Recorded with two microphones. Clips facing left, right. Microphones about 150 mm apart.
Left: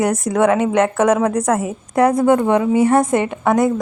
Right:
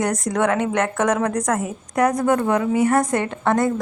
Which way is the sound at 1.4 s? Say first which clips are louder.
Left 4 dB; 30° left (ahead or behind).